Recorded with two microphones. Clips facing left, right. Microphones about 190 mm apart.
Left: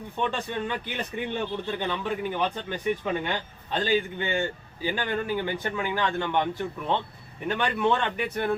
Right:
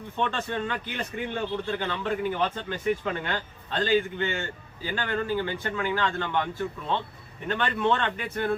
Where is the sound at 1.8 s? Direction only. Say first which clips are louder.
Right 1 dB; 15° left (ahead or behind).